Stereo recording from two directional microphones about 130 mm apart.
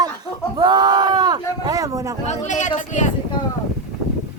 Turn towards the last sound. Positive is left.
turn(degrees=70)  # may be behind; listen again after turning